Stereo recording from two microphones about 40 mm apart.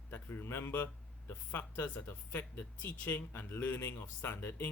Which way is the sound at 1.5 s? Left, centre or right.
Left.